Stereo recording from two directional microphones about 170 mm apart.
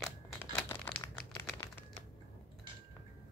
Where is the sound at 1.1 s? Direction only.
15° left (ahead or behind).